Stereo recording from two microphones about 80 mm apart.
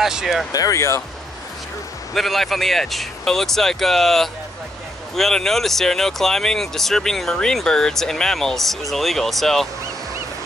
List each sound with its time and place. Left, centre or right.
0.0 s speech: centre
0.5 s speech: left
2.1 s speech: centre